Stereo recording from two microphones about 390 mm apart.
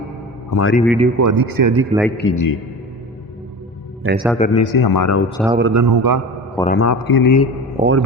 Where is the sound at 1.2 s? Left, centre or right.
Right.